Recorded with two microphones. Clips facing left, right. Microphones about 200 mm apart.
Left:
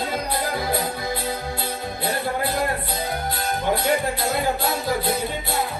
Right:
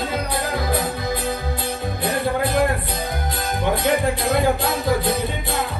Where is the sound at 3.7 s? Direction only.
55° right (ahead or behind).